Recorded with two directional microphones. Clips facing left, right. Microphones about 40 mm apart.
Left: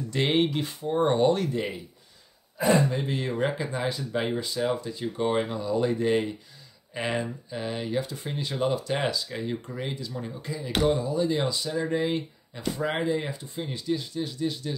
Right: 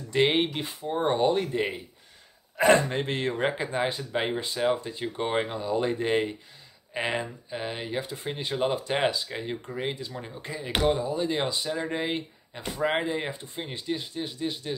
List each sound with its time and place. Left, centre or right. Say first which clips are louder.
0.1 s speech: right 1 dB; right
2.5 s speech: right 2 dB; right
3.3 s speech: even; right
6.9 s speech: even; right